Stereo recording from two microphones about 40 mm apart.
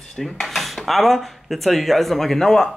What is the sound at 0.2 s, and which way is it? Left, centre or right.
Dishes, centre.